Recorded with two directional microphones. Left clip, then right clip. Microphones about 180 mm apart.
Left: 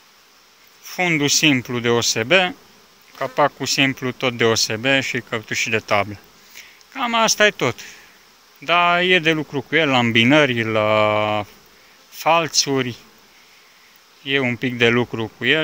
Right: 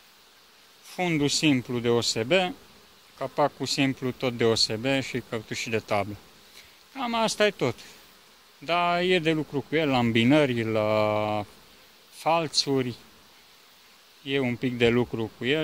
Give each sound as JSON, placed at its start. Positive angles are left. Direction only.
{"t": 0.8, "sound": "speech", "side_deg": -10}
{"t": 14.2, "sound": "speech", "side_deg": -10}